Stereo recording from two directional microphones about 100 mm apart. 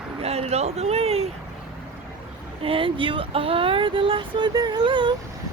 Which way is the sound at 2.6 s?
65° right (ahead or behind).